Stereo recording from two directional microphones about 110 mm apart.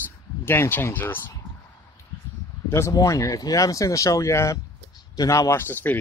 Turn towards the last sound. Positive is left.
turn(degrees=20)  # may be behind; listen again after turning